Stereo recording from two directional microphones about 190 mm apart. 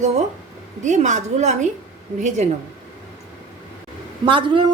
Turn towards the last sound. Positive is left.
turn(degrees=-25)  # may be behind; listen again after turning